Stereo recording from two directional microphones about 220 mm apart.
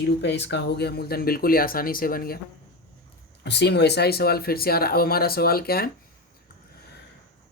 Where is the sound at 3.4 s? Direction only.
50° left (ahead or behind).